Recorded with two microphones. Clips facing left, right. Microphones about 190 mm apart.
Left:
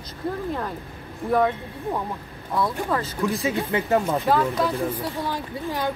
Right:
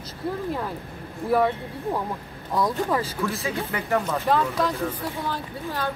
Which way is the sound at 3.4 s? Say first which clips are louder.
Left 4 dB; 25° left (ahead or behind).